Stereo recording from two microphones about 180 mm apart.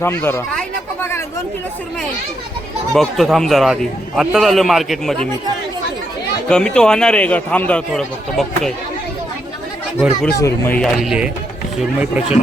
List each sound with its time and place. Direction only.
0.0 s speech: 10° left (ahead or behind)
2.9 s a man's voice: centre (ahead or behind)
6.5 s a man's voice: 5° left (ahead or behind)
10.3 s speech: 15° left (ahead or behind)
10.8 s a man's voice: centre (ahead or behind)